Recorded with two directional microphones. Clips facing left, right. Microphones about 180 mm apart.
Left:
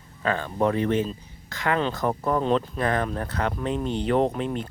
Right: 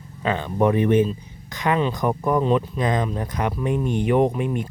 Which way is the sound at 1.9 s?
15° right (ahead or behind).